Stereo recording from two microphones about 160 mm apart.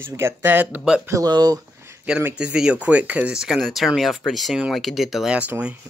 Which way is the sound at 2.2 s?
10° right (ahead or behind).